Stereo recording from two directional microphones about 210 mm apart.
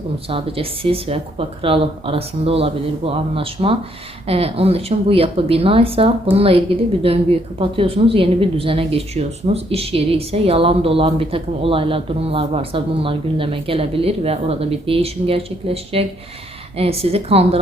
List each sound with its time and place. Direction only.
0.3 s a woman's voice: 25° right (ahead or behind)